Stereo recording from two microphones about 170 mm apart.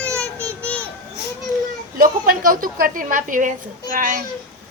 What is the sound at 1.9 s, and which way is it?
A woman's voice, 55° right (ahead or behind).